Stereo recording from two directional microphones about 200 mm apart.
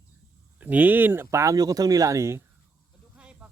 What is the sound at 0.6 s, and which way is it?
Speech, 10° right (ahead or behind).